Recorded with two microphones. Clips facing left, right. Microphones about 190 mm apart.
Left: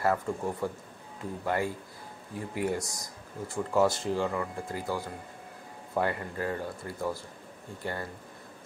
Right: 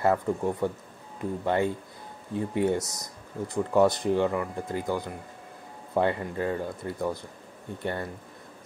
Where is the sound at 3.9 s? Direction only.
20° right (ahead or behind).